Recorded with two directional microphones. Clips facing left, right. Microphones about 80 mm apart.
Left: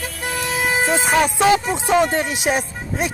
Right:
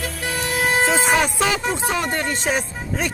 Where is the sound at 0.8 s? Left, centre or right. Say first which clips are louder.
Left 1 dB; centre.